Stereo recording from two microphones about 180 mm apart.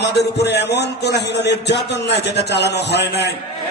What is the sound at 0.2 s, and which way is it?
A man's voice, 70° left (ahead or behind).